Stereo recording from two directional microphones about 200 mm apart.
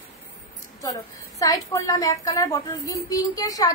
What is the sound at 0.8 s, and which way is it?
A woman's voice, 15° left (ahead or behind).